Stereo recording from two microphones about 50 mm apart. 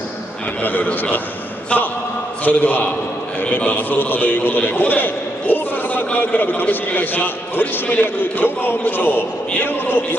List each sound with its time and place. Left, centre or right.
0.6 s a man's voice: left
2.4 s a man's voice: left